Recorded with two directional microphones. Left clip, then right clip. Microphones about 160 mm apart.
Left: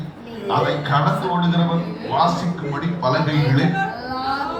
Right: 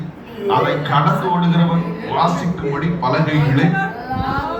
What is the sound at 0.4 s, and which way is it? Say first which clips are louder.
A man's voice: right 4 dB; 15° right (ahead or behind).